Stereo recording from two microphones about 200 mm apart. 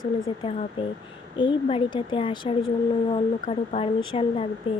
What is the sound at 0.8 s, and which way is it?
Speech, 25° left (ahead or behind).